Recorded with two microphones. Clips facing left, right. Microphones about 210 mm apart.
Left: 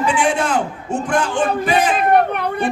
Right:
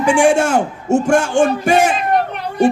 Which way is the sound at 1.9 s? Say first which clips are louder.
Left 3 dB; 55° left (ahead or behind).